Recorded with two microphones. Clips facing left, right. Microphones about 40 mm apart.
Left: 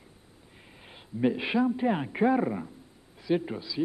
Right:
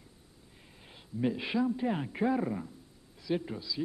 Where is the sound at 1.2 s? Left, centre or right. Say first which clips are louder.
Left 5 dB; left.